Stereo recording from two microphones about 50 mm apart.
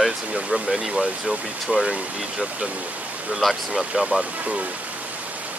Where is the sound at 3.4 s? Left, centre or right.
Centre.